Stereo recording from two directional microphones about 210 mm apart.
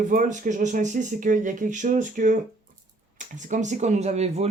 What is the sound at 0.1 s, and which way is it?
Speech, 40° right (ahead or behind).